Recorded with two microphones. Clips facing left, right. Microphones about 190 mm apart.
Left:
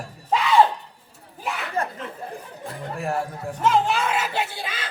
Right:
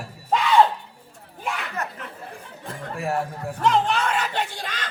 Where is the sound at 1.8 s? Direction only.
30° left (ahead or behind).